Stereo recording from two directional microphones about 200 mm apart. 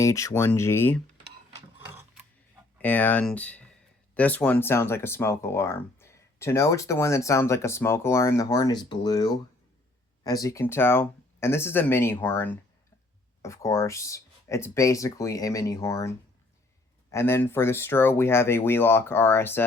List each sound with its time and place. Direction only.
0.0 s speech: 15° left (ahead or behind)
1.9 s a sound: 10° right (ahead or behind)
2.8 s speech: 10° left (ahead or behind)